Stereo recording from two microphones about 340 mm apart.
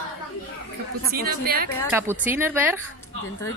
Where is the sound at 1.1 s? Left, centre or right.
Right.